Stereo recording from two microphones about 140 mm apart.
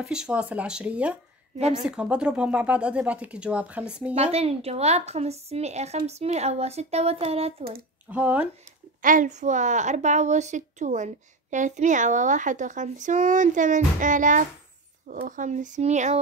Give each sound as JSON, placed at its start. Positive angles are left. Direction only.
{"t": 0.0, "sound": "speech", "side_deg": -5}
{"t": 4.1, "sound": "a woman's voice", "side_deg": -50}
{"t": 8.1, "sound": "speech", "side_deg": -10}
{"t": 9.0, "sound": "speech", "side_deg": -70}